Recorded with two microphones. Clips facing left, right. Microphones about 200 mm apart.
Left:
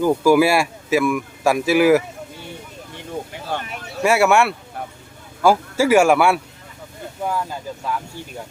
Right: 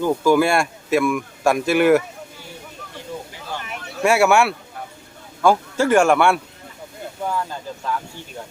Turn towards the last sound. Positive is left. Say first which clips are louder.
# left 1 dB
turn(degrees=10)  # may be behind; listen again after turning